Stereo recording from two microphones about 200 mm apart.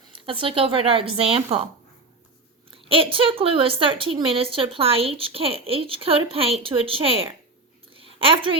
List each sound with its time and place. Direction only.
0.0 s a woman's voice: 25° right (ahead or behind)
2.6 s a woman's voice: 25° right (ahead or behind)
7.9 s a sound: 25° right (ahead or behind)